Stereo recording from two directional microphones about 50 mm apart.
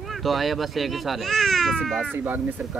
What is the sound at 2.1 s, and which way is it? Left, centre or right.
Speech, right.